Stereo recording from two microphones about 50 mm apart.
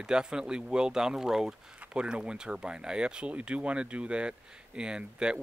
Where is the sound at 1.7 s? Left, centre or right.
Right.